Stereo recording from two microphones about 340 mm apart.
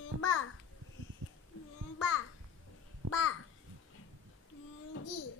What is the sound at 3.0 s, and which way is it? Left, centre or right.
Babbling, right.